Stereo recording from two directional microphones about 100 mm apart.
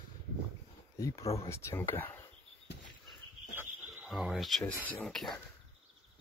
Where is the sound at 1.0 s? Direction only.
35° left (ahead or behind).